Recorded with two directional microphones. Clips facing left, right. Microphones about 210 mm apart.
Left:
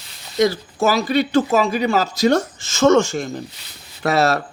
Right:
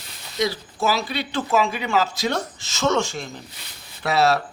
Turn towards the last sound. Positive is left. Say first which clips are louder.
# left 2 dB
turn(degrees=45)  # may be behind; listen again after turning